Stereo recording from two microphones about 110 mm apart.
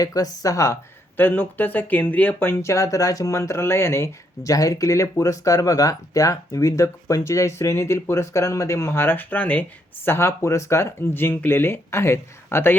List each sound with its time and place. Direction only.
0.0 s speech: 35° left (ahead or behind)